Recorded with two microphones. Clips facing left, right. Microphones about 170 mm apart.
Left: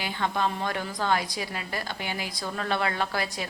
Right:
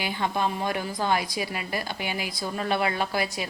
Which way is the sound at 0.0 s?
15° right (ahead or behind).